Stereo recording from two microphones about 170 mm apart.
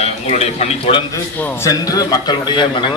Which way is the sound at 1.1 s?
15° left (ahead or behind).